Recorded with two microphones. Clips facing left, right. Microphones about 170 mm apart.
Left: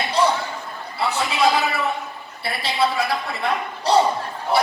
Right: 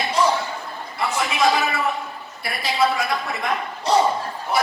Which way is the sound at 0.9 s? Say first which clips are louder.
Left 1 dB; 30° left (ahead or behind).